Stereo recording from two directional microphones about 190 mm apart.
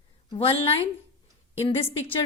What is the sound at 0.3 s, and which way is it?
A woman's voice, 30° left (ahead or behind).